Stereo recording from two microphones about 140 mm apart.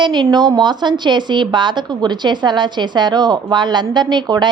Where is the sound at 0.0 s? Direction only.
30° right (ahead or behind).